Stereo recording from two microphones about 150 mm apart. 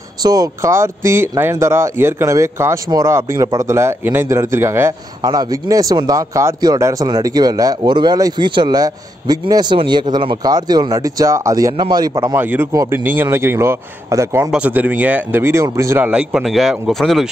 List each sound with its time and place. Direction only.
0.2 s speech: 25° right (ahead or behind)
12.4 s a man's voice: 15° right (ahead or behind)
16.1 s speech: 5° right (ahead or behind)